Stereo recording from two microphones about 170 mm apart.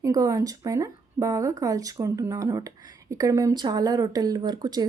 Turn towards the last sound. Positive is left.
turn(degrees=-25)  # may be behind; listen again after turning